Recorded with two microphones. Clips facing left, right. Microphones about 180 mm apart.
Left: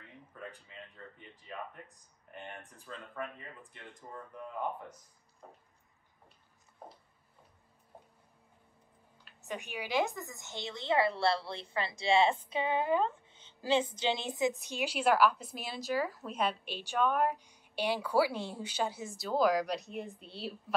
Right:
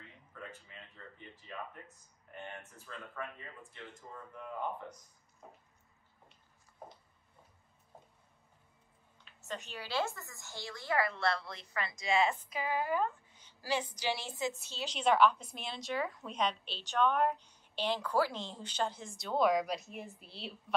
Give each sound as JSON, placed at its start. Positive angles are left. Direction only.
{"t": 9.2, "sound": "a woman's voice", "side_deg": 15}